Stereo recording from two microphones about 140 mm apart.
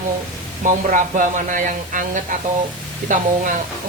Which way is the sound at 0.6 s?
70° right (ahead or behind).